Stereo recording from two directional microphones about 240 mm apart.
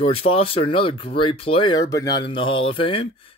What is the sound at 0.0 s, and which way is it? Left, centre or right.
Speech, left.